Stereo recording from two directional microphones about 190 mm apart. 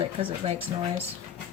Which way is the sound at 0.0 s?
30° right (ahead or behind).